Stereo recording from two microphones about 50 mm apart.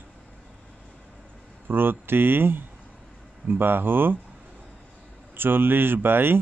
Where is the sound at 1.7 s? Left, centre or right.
Right.